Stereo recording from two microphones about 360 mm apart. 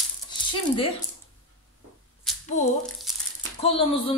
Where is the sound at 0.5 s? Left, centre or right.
Centre.